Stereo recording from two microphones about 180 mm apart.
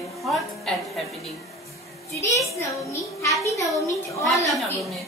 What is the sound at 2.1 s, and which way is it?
A child's voice, 15° left (ahead or behind).